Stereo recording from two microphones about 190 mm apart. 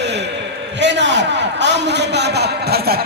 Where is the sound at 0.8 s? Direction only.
65° right (ahead or behind).